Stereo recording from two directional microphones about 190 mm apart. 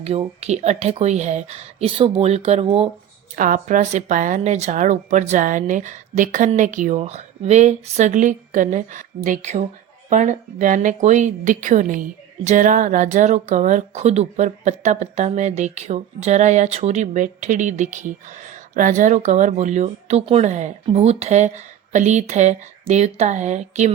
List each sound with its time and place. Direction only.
0.2 s speech: 35° right (ahead or behind)
3.3 s speech: 45° right (ahead or behind)